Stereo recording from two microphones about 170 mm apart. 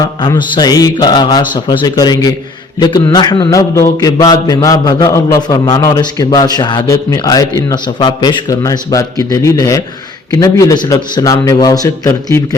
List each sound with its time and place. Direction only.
0.0 s a man's voice: 25° left (ahead or behind)